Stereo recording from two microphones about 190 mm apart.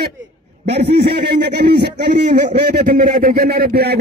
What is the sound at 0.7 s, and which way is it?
A man's voice, 60° right (ahead or behind).